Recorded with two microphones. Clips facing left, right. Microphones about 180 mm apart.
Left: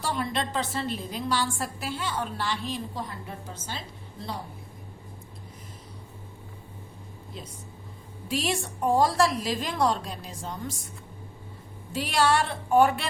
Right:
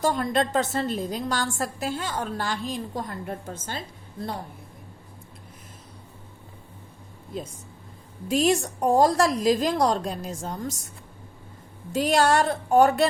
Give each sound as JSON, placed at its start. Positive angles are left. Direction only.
{"t": 0.0, "sound": "a woman's voice", "side_deg": -45}
{"t": 8.3, "sound": "a woman's voice", "side_deg": -45}
{"t": 11.9, "sound": "a woman's voice", "side_deg": -45}